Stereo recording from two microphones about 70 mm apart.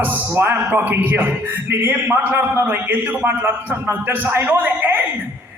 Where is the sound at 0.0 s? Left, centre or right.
Right.